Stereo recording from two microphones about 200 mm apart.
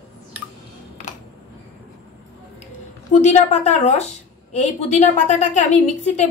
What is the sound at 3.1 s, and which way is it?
A woman's voice, 35° left (ahead or behind).